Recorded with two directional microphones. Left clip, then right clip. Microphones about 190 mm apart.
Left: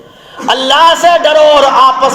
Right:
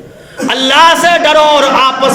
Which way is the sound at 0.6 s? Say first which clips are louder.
Right 1 dB; 20° right (ahead or behind).